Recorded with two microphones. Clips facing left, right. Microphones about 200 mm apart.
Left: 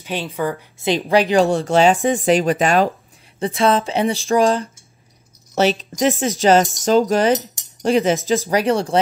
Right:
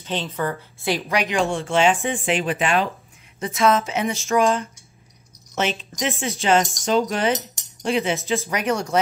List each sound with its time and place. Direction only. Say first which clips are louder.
0.0 s a woman's voice: left 3 dB; 10° left (ahead or behind)
0.9 s speech: left 8 dB; 30° left (ahead or behind)
3.3 s speech: left 2 dB; 30° left (ahead or behind)